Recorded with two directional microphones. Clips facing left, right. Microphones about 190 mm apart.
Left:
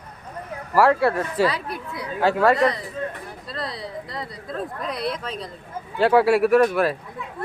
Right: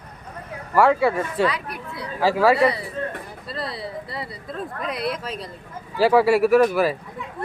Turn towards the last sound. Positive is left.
turn(degrees=0)  # may be behind; listen again after turning